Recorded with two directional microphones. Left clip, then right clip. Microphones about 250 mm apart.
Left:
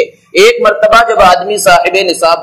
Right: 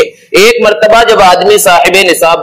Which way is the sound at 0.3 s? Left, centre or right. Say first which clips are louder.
Right 1 dB; right.